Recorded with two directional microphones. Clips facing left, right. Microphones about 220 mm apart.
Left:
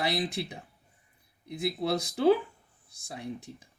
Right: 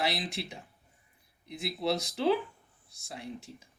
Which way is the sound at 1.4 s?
50° left (ahead or behind).